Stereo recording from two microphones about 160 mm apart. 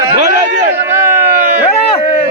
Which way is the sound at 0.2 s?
50° right (ahead or behind).